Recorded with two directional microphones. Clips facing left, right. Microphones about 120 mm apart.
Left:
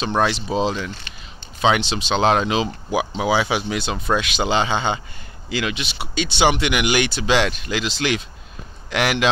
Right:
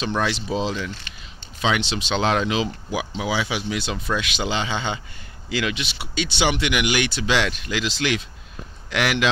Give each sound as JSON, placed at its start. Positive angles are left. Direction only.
{"t": 0.1, "sound": "speech", "side_deg": 40}